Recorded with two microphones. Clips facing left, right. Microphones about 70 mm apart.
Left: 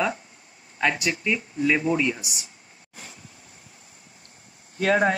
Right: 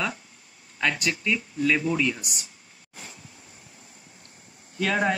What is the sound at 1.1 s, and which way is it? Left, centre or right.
Speech, centre.